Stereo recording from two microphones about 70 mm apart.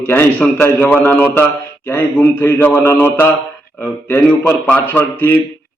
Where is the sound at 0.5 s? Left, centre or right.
Left.